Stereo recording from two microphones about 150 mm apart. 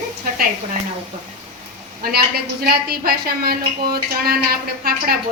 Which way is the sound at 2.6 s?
90° right.